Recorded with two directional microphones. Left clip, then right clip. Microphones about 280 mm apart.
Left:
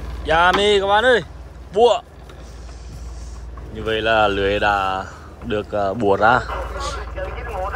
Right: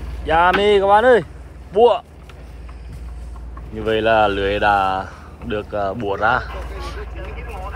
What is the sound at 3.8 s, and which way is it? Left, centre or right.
Speech, centre.